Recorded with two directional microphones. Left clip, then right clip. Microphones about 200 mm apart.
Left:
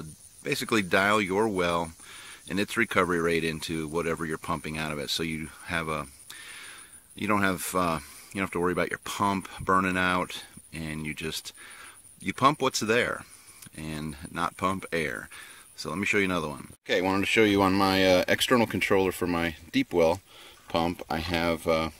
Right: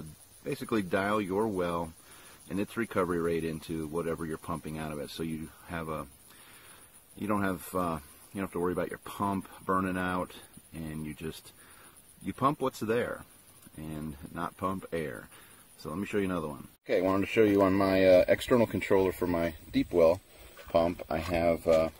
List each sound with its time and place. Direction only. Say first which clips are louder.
0.4 s speech: left 6 dB; 15° left (ahead or behind)
7.2 s speech: left 6 dB; 15° left (ahead or behind)